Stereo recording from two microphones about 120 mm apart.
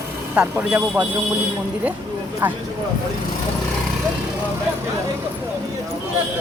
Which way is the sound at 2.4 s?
15° right (ahead or behind).